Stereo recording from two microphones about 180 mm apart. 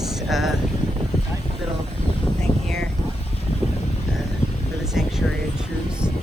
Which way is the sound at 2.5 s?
30° left (ahead or behind).